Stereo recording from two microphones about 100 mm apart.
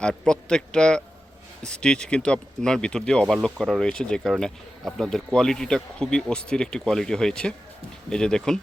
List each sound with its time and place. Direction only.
0.0 s speech: 10° left (ahead or behind)